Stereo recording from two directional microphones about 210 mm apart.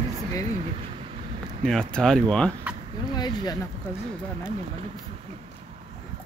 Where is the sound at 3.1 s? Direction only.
20° left (ahead or behind).